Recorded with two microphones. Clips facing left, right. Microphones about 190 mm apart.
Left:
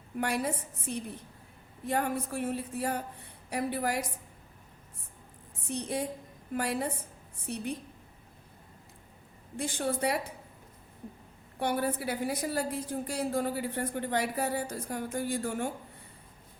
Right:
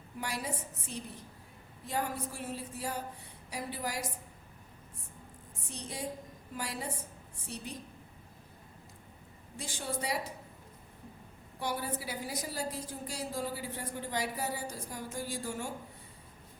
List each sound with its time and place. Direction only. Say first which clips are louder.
0.2 s a woman's voice: left 7 dB; 60° left (ahead or behind)
5.7 s a woman's voice: left 7 dB; 60° left (ahead or behind)
9.6 s a woman's voice: left 7 dB; 55° left (ahead or behind)
11.6 s a woman's voice: left 6 dB; 60° left (ahead or behind)